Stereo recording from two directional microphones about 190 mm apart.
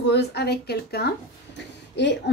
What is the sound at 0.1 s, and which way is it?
A woman's voice, 60° left (ahead or behind).